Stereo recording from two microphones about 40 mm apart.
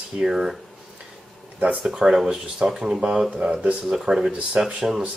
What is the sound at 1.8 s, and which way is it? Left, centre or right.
Speech, centre.